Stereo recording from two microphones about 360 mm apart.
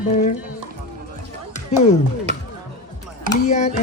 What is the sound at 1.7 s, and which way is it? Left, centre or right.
Speech, centre.